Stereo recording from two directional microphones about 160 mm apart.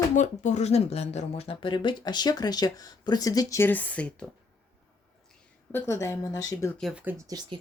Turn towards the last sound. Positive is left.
turn(degrees=-20)  # may be behind; listen again after turning